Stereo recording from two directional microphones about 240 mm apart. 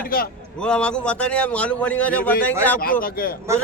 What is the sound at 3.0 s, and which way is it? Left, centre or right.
Speech, left.